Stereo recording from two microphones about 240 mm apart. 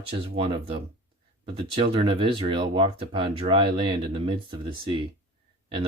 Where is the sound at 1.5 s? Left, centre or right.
Right.